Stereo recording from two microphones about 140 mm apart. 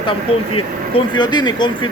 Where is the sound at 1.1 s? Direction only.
30° left (ahead or behind).